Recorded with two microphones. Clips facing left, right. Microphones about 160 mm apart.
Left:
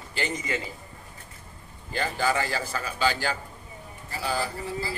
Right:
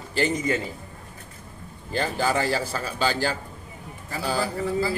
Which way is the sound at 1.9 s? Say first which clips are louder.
Right 2 dB; 35° right (ahead or behind).